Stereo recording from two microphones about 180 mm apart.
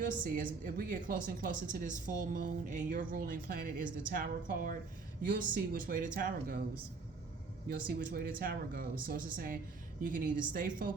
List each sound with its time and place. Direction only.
0.0 s a woman's voice: 50° right (ahead or behind)
7.9 s a woman's voice: 55° right (ahead or behind)